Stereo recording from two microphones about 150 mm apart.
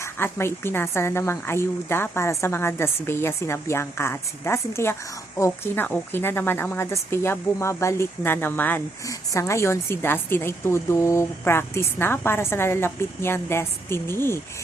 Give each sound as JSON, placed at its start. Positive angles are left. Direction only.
{"t": 0.0, "sound": "speech", "side_deg": 15}